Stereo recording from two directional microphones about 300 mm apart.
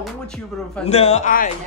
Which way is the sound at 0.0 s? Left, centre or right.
Centre.